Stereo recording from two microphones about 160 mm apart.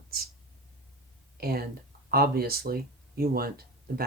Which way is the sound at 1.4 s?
75° right (ahead or behind).